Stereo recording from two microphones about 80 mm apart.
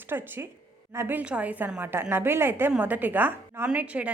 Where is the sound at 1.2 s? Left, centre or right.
Centre.